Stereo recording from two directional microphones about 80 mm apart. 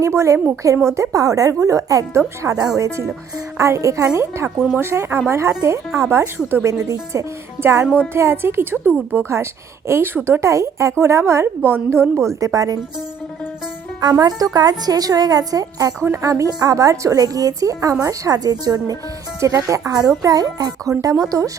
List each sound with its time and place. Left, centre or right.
0.0 s a woman's voice: right
8.9 s speech: centre
9.3 s a woman's voice: right
14.0 s a woman's voice: right